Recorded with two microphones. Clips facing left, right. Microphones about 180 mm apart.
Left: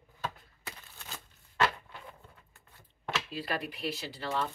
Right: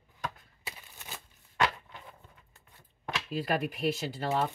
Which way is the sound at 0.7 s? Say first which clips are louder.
Even; 15° right (ahead or behind).